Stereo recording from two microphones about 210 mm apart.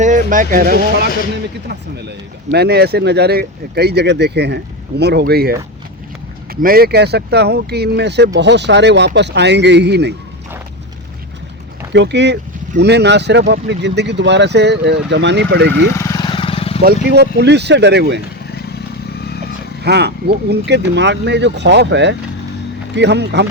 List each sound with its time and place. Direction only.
0.0 s speech: 40° right (ahead or behind); by 10.2 s 55° right (ahead or behind)
11.9 s speech: 55° right (ahead or behind)
16.0 s vehicle: 15° left (ahead or behind)
16.8 s speech: 50° right (ahead or behind)
19.8 s speech: 50° right (ahead or behind)